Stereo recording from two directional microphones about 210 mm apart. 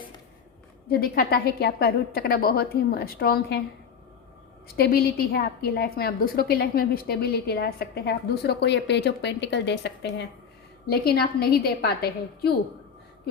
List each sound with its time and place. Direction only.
0.9 s a woman's voice: 45° left (ahead or behind)
4.7 s a woman's voice: 45° left (ahead or behind)